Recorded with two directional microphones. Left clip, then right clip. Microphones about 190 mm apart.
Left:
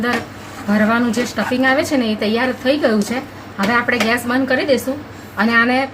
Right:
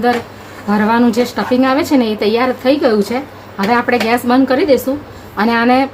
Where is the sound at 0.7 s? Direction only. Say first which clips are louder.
Right 4 dB; 40° right (ahead or behind).